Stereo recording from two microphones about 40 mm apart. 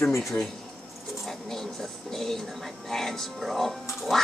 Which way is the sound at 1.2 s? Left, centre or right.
Centre.